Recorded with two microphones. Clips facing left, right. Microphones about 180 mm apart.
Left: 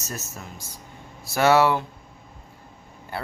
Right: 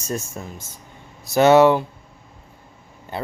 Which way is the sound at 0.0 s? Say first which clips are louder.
Right 8 dB; 30° right (ahead or behind).